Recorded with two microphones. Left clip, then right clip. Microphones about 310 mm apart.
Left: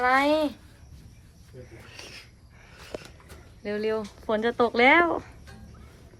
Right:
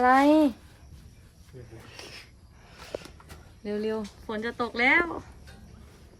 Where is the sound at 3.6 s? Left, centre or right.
Centre.